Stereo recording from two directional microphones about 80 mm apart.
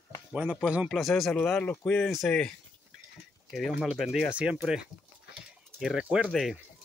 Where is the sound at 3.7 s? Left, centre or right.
Centre.